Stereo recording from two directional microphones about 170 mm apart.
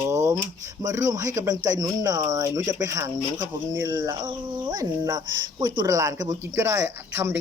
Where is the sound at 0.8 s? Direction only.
20° right (ahead or behind).